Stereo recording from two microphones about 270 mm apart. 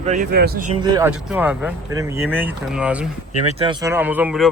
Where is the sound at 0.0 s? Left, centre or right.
Right.